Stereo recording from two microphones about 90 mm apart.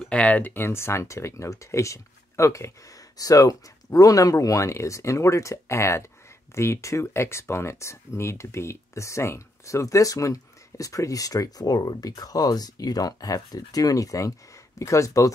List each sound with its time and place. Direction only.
0.1 s speech: 15° left (ahead or behind); by 15.3 s 35° left (ahead or behind)